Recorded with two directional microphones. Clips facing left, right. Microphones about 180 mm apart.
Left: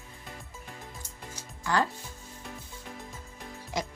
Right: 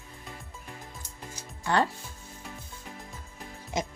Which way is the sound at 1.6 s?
30° right (ahead or behind).